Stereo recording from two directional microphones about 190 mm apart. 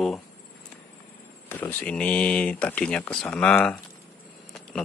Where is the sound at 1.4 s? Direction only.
10° left (ahead or behind).